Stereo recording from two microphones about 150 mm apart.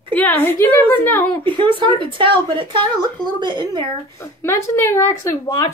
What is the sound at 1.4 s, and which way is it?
Speech, 35° right (ahead or behind).